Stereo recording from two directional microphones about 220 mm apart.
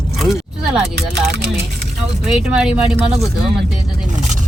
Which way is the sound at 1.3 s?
50° right (ahead or behind).